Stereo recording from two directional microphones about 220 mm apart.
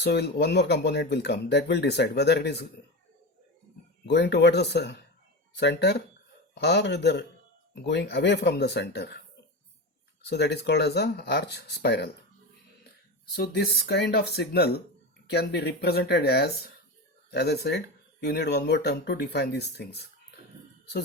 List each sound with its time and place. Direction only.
0.0 s speech: 50° left (ahead or behind)
4.0 s speech: 50° left (ahead or behind)
10.2 s speech: 50° left (ahead or behind)
13.3 s speech: 45° left (ahead or behind)